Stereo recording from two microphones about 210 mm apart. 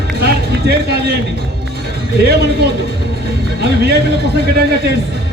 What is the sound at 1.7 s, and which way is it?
A man's voice, 50° right (ahead or behind).